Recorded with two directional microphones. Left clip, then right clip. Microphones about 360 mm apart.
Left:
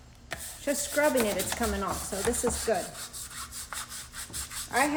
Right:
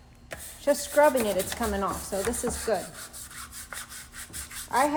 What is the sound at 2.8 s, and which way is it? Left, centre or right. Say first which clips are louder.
Rub: left 2 dB; centre.